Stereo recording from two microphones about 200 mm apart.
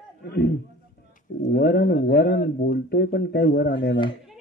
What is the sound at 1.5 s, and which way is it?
A man's voice, 50° left (ahead or behind).